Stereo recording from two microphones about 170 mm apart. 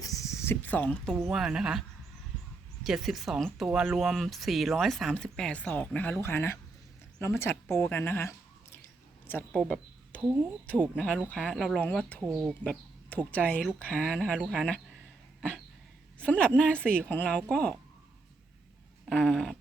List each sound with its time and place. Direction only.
0.0 s a sound: 20° left (ahead or behind)
1.1 s speech: 5° right (ahead or behind)
2.8 s a woman's voice: centre (ahead or behind); by 8.8 s 15° left (ahead or behind)
9.5 s a sound: centre (ahead or behind)
10.2 s a woman's voice: 10° right (ahead or behind)
10.9 s a woman's voice: 5° left (ahead or behind)
12.2 s speech: 5° right (ahead or behind)
12.6 s speech: 10° left (ahead or behind)
14.3 s a woman's voice: 5° right (ahead or behind)
15.4 s cough: centre (ahead or behind)
16.1 s a woman's voice: 5° left (ahead or behind)
19.0 s speech: 5° left (ahead or behind)